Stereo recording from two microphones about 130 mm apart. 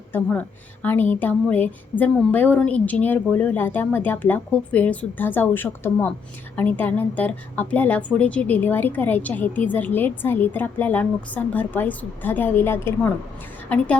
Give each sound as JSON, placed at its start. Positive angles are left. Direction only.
{"t": 0.1, "sound": "a woman's voice", "side_deg": 15}